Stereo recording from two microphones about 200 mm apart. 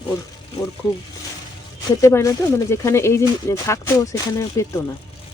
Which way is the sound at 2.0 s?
15° left (ahead or behind).